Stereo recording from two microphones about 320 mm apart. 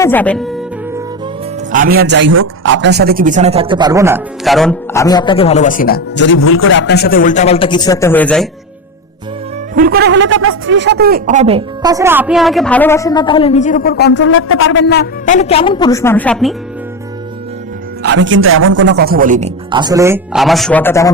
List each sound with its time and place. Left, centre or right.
0.0 s speech: centre
1.7 s a man's voice: right; by 5.0 s centre
5.0 s speech: centre
9.7 s speech: right; by 16.6 s centre
18.0 s a man's voice: right; by 21.1 s centre